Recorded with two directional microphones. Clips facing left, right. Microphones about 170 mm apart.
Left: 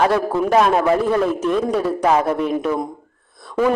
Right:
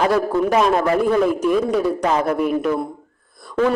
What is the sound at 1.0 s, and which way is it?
A man's voice, centre (ahead or behind).